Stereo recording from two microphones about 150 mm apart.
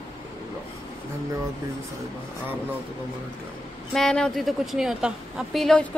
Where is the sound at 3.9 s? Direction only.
5° left (ahead or behind).